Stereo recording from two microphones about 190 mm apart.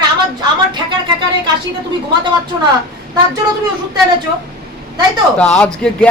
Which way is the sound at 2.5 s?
20° right (ahead or behind).